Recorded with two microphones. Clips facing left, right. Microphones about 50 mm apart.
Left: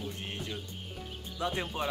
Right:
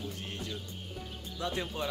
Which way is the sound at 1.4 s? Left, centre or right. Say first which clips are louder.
Left 2 dB; left.